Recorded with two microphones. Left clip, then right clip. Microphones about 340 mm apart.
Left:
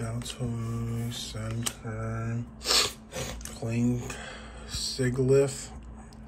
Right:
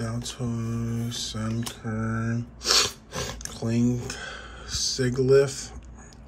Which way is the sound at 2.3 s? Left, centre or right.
Centre.